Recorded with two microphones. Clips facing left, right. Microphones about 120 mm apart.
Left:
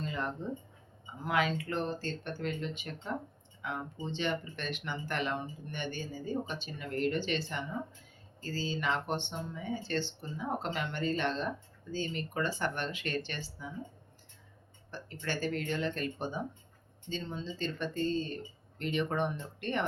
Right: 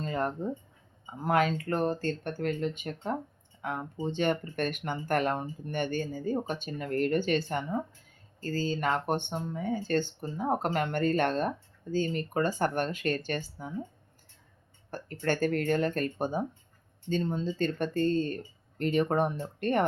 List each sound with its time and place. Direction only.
0.0 s a sound: 45° right (ahead or behind)
1.2 s speech: 45° right (ahead or behind)
14.8 s speech: 50° right (ahead or behind)